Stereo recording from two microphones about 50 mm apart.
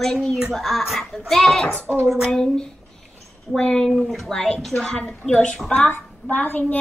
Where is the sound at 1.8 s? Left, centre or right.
Right.